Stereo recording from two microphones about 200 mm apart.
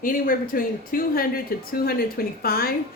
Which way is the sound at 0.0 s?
45° left (ahead or behind).